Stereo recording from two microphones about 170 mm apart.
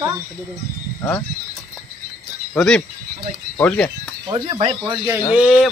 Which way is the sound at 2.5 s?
5° left (ahead or behind).